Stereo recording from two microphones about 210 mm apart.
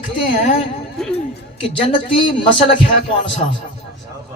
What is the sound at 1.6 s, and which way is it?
Speech, 25° left (ahead or behind).